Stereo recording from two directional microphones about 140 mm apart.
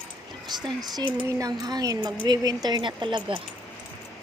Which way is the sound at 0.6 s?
30° right (ahead or behind).